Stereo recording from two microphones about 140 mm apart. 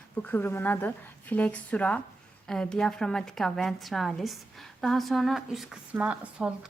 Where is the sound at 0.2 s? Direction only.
15° left (ahead or behind).